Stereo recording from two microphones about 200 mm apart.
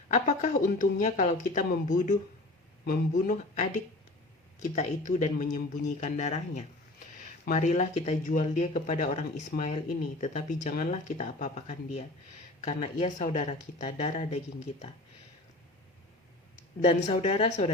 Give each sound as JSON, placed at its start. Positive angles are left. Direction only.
{"t": 0.1, "sound": "speech", "side_deg": 40}
{"t": 16.8, "sound": "speech", "side_deg": 30}